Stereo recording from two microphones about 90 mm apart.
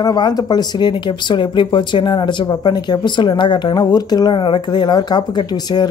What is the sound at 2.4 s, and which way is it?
Speech, 50° left (ahead or behind).